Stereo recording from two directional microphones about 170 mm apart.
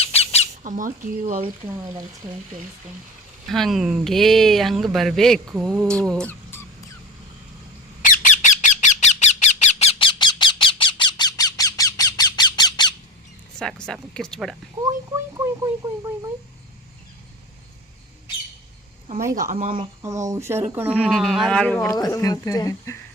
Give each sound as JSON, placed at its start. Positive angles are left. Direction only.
{"t": 0.0, "sound": "squawk", "side_deg": 35}
{"t": 0.6, "sound": "speech", "side_deg": -50}
{"t": 3.5, "sound": "speech", "side_deg": 0}
{"t": 6.1, "sound": "a sound", "side_deg": 10}
{"t": 8.1, "sound": "a sound", "side_deg": 50}
{"t": 13.6, "sound": "speech", "side_deg": 5}
{"t": 14.8, "sound": "speech", "side_deg": -20}
{"t": 19.2, "sound": "speech", "side_deg": -20}
{"t": 19.5, "sound": "speech", "side_deg": -40}
{"t": 20.0, "sound": "speech", "side_deg": -20}
{"t": 21.0, "sound": "speech", "side_deg": 0}
{"t": 21.9, "sound": "speech", "side_deg": 20}